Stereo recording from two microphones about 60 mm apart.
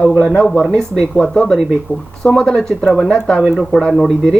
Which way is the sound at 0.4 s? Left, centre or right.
Centre.